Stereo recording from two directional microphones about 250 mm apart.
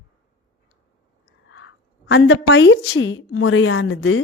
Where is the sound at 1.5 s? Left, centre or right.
Left.